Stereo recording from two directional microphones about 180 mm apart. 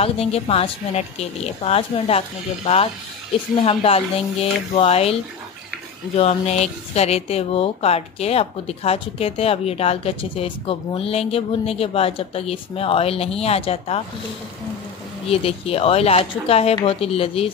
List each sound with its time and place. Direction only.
0.0 s speech: 35° left (ahead or behind)
15.2 s speech: 35° left (ahead or behind)